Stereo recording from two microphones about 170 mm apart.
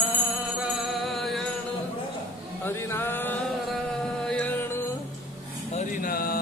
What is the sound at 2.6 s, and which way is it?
Music, 15° left (ahead or behind).